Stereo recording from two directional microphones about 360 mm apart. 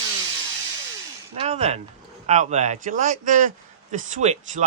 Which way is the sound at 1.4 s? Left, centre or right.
Centre.